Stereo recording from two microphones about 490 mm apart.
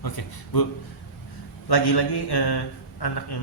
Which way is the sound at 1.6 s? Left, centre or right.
Left.